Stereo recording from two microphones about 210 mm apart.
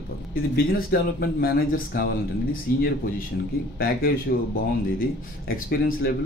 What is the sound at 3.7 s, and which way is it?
Speech, 45° left (ahead or behind).